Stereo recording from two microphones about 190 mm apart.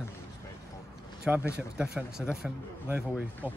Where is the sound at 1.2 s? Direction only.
5° right (ahead or behind).